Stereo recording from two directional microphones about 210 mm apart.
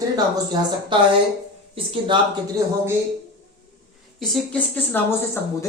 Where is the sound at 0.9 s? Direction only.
25° right (ahead or behind).